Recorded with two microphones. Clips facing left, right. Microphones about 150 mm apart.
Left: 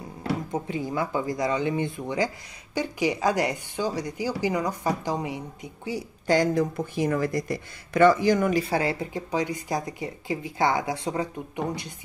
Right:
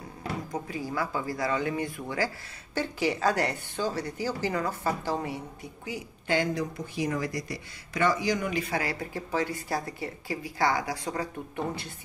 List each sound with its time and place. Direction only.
0.5 s speech: 25° left (ahead or behind)
5.9 s speech: 35° left (ahead or behind)
8.6 s speech: 30° left (ahead or behind)